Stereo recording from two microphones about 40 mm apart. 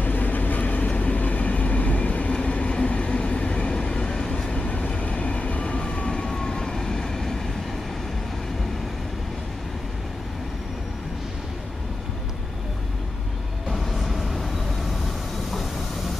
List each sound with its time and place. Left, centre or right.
0.0 s vehicle: left
2.3 s train: left
3.2 s vehicle: left
13.7 s vehicle: centre